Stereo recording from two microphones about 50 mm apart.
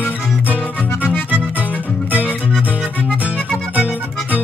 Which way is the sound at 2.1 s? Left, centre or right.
Right.